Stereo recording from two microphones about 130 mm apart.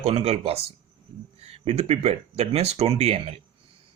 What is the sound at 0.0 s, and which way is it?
Speech, 50° right (ahead or behind).